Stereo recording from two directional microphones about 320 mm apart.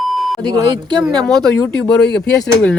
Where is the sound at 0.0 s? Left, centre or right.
Centre.